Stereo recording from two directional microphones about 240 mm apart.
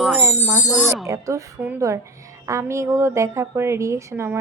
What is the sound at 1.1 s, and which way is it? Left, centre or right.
Speech, centre.